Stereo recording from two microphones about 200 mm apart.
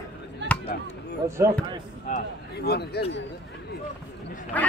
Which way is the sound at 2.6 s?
55° left (ahead or behind).